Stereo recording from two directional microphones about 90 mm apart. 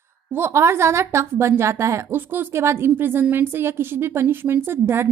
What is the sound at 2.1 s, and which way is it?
A woman's voice, 25° right (ahead or behind).